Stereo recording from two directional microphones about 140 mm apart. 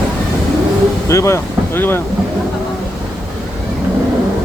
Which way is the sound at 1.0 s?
20° left (ahead or behind).